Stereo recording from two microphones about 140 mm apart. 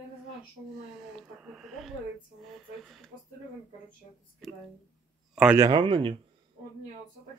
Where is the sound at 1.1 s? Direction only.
5° right (ahead or behind).